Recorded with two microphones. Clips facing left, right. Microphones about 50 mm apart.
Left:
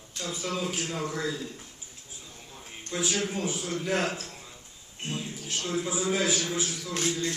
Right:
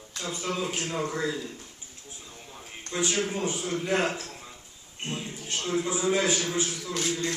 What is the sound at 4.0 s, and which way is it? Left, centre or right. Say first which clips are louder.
Speech: right 2 dB; right.